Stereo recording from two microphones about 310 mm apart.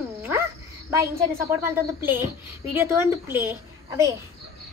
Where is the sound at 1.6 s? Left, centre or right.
Centre.